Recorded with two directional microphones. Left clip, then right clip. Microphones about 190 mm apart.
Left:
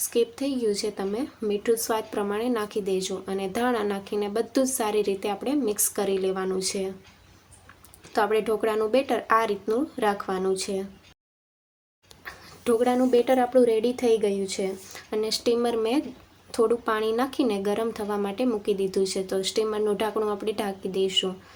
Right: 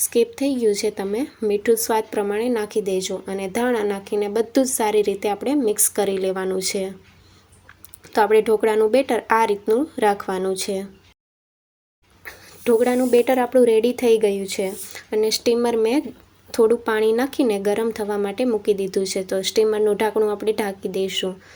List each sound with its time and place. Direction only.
0.1 s a woman's voice: 25° right (ahead or behind)
8.1 s a woman's voice: 25° right (ahead or behind)
12.2 s a woman's voice: 25° right (ahead or behind)